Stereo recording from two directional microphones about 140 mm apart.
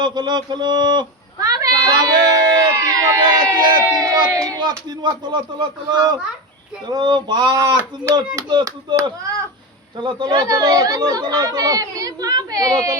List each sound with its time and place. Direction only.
0.0 s a sound: 30° right (ahead or behind)
4.3 s a child's voice: 25° right (ahead or behind)
10.0 s a child's voice: 35° right (ahead or behind)